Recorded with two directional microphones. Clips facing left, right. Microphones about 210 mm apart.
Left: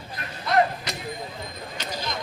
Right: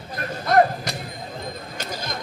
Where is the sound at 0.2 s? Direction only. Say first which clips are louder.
Right 4 dB; 45° right (ahead or behind).